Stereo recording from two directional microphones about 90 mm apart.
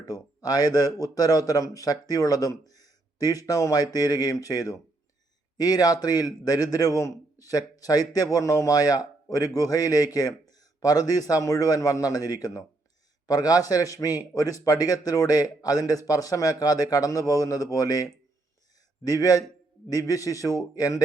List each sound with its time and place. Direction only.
0.0 s a man's voice: 45° left (ahead or behind)